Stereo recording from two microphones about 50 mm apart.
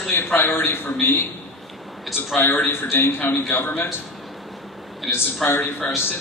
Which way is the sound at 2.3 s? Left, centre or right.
Left.